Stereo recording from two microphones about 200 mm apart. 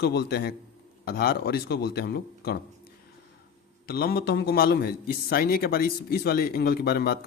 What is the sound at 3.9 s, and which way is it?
Speech, 50° left (ahead or behind).